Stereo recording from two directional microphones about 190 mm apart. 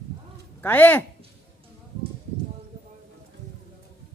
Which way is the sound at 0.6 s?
10° left (ahead or behind).